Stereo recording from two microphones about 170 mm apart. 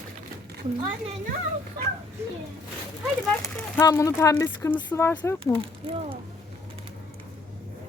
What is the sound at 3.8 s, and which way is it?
Speech, 20° left (ahead or behind).